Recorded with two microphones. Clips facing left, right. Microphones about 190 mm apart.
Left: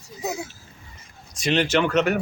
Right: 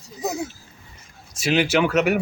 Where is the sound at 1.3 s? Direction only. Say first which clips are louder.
Right 1 dB; 5° right (ahead or behind).